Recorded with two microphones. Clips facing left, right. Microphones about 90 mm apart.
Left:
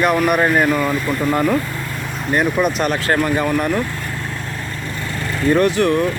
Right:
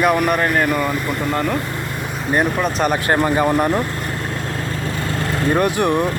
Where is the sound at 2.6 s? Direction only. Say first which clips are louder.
Left 1 dB; centre (ahead or behind).